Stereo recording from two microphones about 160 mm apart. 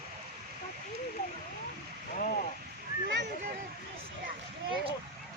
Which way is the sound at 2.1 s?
60° left (ahead or behind).